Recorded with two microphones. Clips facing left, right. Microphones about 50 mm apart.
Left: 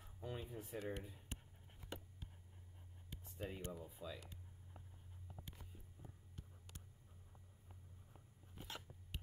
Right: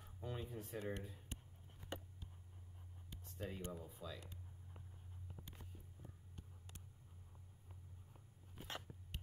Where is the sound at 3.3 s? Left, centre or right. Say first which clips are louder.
Even; centre.